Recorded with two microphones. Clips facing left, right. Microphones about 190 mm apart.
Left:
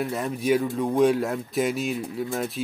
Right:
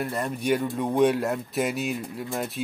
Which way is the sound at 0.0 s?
Centre (ahead or behind).